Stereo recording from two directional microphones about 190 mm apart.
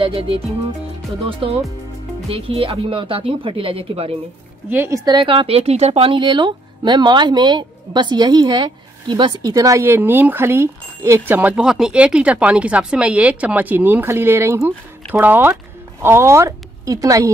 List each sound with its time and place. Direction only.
0.0 s speech: 30° right (ahead or behind)
4.6 s a woman's voice: 10° right (ahead or behind)